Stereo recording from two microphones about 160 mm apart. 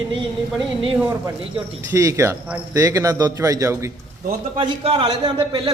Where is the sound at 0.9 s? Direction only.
10° right (ahead or behind).